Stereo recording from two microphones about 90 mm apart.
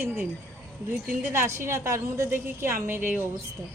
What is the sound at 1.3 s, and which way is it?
A woman's voice, 30° right (ahead or behind).